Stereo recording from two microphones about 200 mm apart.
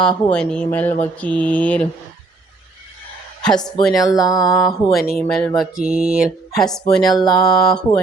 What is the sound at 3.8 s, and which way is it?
Speech, centre (ahead or behind).